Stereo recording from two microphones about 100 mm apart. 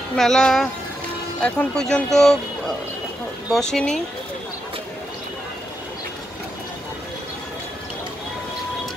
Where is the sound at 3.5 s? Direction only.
5° left (ahead or behind).